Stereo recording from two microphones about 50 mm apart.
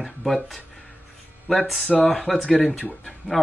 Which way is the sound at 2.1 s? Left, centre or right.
Centre.